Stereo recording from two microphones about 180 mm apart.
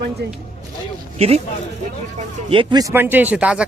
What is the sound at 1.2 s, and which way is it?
Speech, 35° right (ahead or behind).